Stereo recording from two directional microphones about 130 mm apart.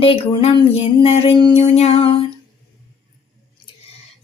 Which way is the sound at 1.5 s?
55° left (ahead or behind).